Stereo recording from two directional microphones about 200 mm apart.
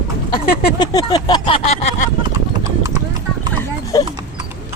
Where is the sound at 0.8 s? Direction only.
20° left (ahead or behind).